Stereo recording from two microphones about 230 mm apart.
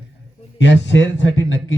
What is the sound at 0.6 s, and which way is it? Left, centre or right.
Speech, left.